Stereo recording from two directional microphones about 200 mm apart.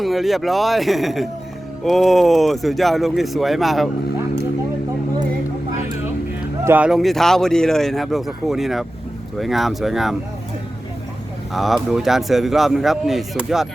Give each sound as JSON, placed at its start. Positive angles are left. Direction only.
{"t": 0.0, "sound": "speech", "side_deg": 0}
{"t": 6.7, "sound": "speech", "side_deg": -5}
{"t": 11.5, "sound": "speech", "side_deg": 0}